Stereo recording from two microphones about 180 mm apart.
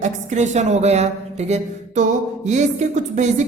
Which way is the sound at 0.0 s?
40° right (ahead or behind).